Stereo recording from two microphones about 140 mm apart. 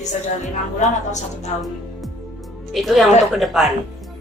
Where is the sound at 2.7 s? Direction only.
Centre (ahead or behind).